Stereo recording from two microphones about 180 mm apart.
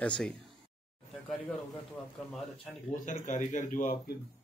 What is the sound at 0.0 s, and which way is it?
Speech, 5° left (ahead or behind).